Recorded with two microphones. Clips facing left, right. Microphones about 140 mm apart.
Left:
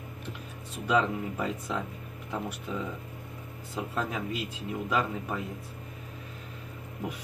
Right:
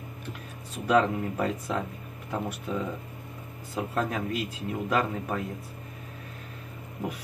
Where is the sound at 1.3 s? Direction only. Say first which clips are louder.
Right 3 dB; 5° right (ahead or behind).